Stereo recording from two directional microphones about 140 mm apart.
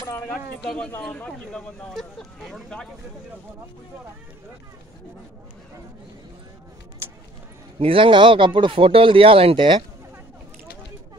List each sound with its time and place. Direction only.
0.0 s keys jangling: 20° left (ahead or behind)
0.7 s speech: 5° left (ahead or behind)
7.8 s speech: 40° right (ahead or behind)